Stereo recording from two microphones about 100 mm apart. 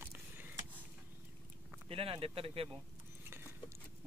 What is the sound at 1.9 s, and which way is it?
Speech, 70° right (ahead or behind).